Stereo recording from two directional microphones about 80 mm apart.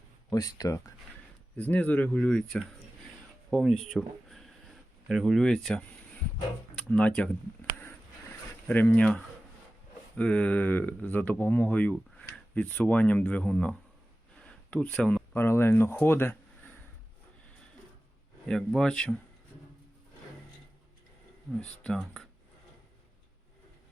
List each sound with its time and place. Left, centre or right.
0.3 s speech: left
1.5 s speech: left
8.6 s speech: left
14.3 s a sound: centre
15.4 s speech: left
18.4 s speech: centre